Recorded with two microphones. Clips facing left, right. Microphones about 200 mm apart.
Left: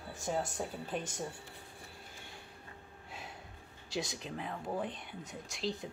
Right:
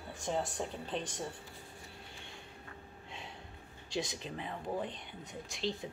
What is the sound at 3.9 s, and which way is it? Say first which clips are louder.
Speech: right 1 dB; centre (ahead or behind).